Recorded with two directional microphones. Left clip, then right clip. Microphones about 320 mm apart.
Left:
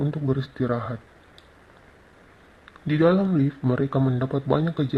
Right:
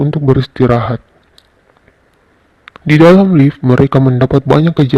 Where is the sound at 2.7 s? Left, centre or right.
Right.